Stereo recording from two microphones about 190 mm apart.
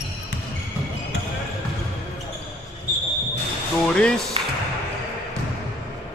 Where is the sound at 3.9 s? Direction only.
5° left (ahead or behind).